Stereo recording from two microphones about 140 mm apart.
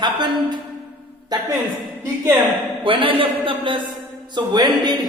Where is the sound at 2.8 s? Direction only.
40° right (ahead or behind).